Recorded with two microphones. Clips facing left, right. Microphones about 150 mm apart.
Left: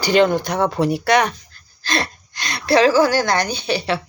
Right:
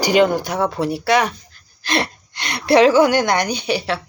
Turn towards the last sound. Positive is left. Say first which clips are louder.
# right 1 dB
turn(degrees=-10)  # may be behind; listen again after turning